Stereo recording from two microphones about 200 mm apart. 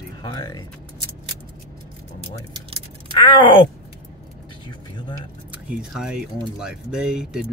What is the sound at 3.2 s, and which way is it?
Speech, 20° left (ahead or behind).